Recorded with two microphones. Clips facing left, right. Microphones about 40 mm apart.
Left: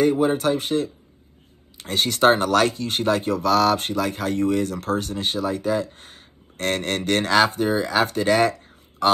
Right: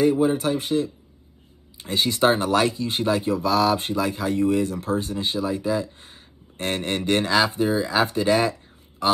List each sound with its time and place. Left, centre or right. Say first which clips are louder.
0.0 s speech: left 1 dB; left
2.2 s speech: left 3 dB; left
6.6 s speech: left 2 dB; centre
7.3 s speech: left 4 dB; left